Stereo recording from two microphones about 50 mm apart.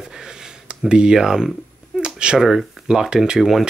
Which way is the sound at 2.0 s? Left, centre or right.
Centre.